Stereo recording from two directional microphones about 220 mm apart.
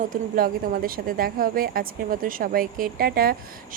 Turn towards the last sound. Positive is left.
turn(degrees=-45)  # may be behind; listen again after turning